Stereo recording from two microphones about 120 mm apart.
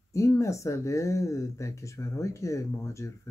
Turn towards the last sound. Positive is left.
turn(degrees=25)  # may be behind; listen again after turning